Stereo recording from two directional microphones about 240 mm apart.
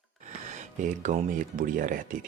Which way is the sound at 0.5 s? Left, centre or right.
Right.